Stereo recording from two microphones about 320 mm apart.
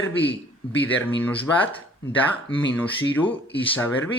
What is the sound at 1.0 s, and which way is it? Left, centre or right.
Speech, centre.